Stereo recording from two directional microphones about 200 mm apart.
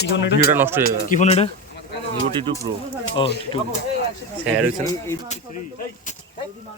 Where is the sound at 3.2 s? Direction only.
25° left (ahead or behind).